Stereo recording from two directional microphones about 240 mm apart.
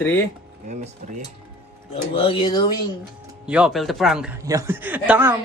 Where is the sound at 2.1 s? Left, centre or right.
Left.